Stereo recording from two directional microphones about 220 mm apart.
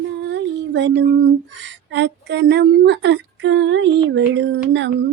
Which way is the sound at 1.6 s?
55° right (ahead or behind).